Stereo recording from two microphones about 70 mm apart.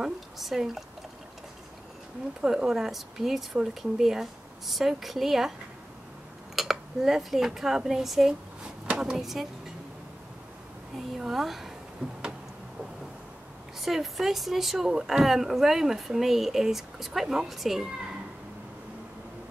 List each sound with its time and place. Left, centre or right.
0.0 s speech: centre
2.4 s speech: centre
6.5 s speech: centre
11.0 s speech: centre
12.0 s a sound: centre
13.7 s speech: centre